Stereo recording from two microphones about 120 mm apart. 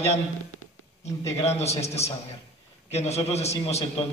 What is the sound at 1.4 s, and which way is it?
A man's voice, 60° left (ahead or behind).